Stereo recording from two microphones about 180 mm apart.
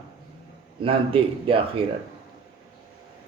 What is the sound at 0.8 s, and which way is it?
Speech, 30° right (ahead or behind).